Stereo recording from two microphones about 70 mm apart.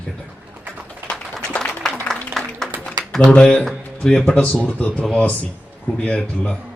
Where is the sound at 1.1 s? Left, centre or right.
Centre.